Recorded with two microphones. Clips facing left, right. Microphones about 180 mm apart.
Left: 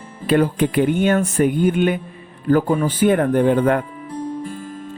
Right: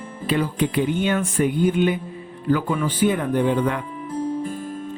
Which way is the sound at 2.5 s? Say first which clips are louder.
Left 5 dB; 40° left (ahead or behind).